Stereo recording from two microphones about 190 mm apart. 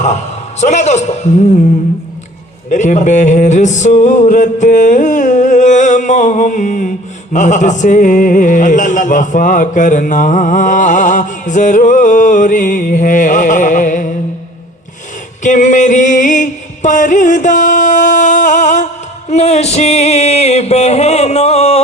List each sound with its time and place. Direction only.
0.6 s music: 40° left (ahead or behind)
2.6 s music: 40° left (ahead or behind)
7.3 s a sound: 40° left (ahead or behind)
15.4 s music: 40° left (ahead or behind)